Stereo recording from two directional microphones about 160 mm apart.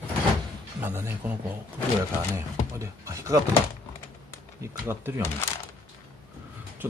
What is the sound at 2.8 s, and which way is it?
Speech, 20° right (ahead or behind).